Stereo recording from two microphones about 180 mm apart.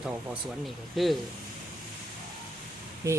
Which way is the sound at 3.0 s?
15° right (ahead or behind).